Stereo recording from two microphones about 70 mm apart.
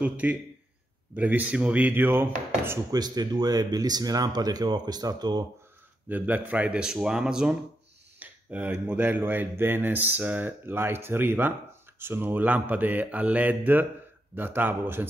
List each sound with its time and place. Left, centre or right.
0.0 s speech: centre
2.9 s speech: right
6.0 s speech: right
8.2 s speech: right
10.7 s speech: right